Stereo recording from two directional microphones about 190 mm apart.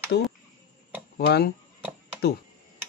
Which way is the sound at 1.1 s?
55° left (ahead or behind).